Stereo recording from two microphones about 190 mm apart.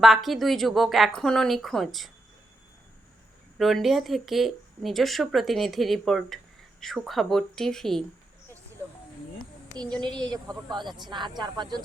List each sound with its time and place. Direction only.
0.0 s speech: centre (ahead or behind)
3.6 s speech: centre (ahead or behind)
10.3 s speech: 20° right (ahead or behind)